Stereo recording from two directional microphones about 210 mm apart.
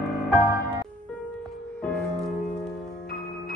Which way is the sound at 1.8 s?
5° left (ahead or behind).